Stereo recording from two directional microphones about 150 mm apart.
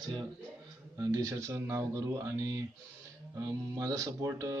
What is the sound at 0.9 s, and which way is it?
Speech, 25° right (ahead or behind).